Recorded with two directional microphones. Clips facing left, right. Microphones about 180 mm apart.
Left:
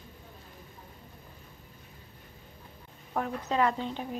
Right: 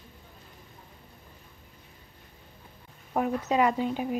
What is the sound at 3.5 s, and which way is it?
Speech, 10° right (ahead or behind).